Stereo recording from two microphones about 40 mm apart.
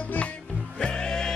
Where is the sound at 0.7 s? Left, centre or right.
Left.